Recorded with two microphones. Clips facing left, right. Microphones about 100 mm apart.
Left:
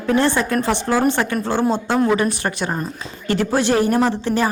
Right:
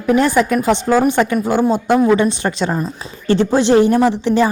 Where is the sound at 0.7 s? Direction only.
20° right (ahead or behind).